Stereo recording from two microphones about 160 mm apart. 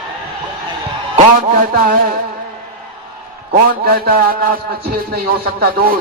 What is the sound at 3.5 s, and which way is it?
A man's voice, 70° right (ahead or behind).